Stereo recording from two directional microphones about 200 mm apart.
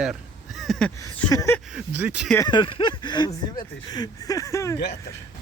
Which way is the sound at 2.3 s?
20° left (ahead or behind).